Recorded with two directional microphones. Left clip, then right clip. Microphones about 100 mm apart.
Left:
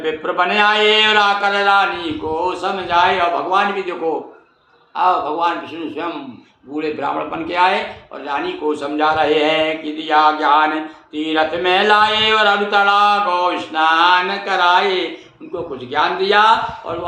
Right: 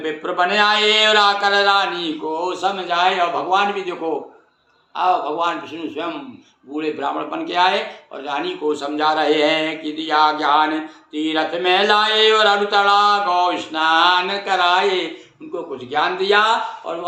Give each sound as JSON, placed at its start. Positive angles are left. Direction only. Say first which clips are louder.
{"t": 0.0, "sound": "speech", "louder": "left 2 dB", "side_deg": -25}
{"t": 4.9, "sound": "speech", "louder": "left 2 dB", "side_deg": -25}
{"t": 6.7, "sound": "a man's voice", "louder": "left 2 dB", "side_deg": -10}